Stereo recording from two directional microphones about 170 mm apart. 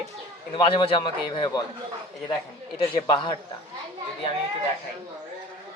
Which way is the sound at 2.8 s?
25° left (ahead or behind).